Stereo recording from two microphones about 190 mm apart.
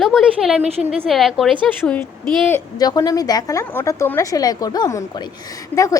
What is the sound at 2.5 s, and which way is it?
A woman's voice, 15° left (ahead or behind).